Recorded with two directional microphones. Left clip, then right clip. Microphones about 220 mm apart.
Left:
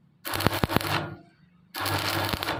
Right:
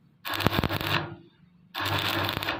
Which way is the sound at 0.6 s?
5° right (ahead or behind).